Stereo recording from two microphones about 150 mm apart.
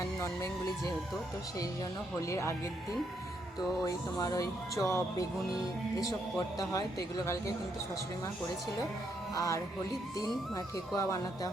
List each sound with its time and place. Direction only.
2.3 s speech: 20° left (ahead or behind)
3.8 s speech: 25° left (ahead or behind)
9.3 s music: 25° left (ahead or behind)
10.9 s speech: 25° left (ahead or behind)